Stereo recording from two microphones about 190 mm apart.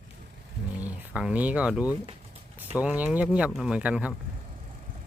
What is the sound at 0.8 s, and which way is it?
Speech, 5° right (ahead or behind).